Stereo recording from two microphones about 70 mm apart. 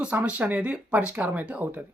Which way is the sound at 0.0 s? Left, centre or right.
Right.